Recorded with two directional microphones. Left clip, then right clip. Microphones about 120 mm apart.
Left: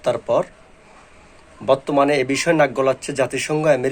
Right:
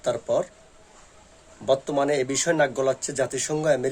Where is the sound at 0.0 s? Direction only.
20° right (ahead or behind).